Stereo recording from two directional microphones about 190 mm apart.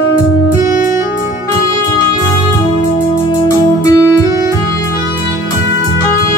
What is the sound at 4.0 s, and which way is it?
Music, 15° left (ahead or behind).